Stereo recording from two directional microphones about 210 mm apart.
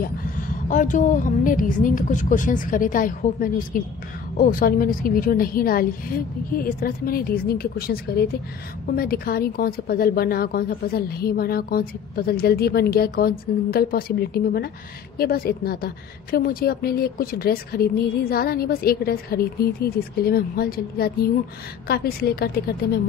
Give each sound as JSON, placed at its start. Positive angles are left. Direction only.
{"t": 0.7, "sound": "a woman's voice", "side_deg": 40}